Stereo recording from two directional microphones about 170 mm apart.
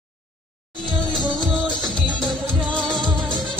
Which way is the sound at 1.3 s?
Centre (ahead or behind).